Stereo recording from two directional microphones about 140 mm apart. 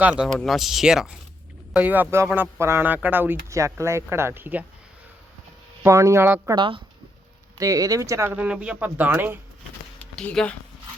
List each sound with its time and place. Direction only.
0.0 s speech: 5° right (ahead or behind)
5.8 s speech: 20° right (ahead or behind)
6.5 s speech: 35° right (ahead or behind)
7.6 s speech: 25° right (ahead or behind)
8.4 s speech: 10° right (ahead or behind)
10.2 s speech: 5° left (ahead or behind)